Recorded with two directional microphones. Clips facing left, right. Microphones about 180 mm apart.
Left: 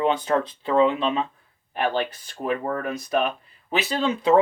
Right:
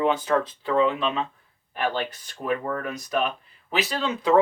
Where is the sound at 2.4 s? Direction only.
35° left (ahead or behind).